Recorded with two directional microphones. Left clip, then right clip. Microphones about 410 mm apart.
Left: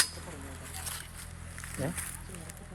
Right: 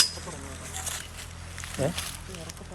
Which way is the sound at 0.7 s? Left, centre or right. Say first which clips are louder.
Right 6 dB; centre.